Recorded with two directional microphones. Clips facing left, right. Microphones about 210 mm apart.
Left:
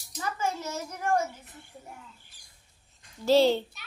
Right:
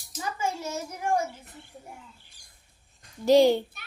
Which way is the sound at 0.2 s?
10° right (ahead or behind).